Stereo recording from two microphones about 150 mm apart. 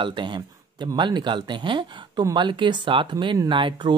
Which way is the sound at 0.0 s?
30° right (ahead or behind).